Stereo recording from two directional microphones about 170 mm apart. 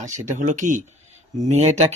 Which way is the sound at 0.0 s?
45° right (ahead or behind).